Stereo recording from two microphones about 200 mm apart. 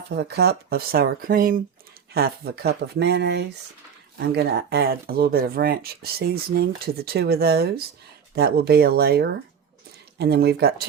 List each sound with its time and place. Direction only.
0.1 s speech: 55° right (ahead or behind)